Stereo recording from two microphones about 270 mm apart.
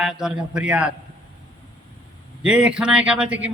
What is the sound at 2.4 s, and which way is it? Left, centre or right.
A man's voice, centre.